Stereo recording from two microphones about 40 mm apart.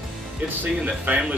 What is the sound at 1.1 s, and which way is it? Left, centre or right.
Speech, right.